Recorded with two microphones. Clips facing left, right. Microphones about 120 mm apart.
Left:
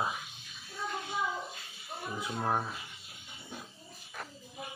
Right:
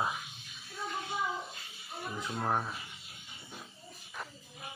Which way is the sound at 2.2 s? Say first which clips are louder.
Left 1 dB; 10° left (ahead or behind).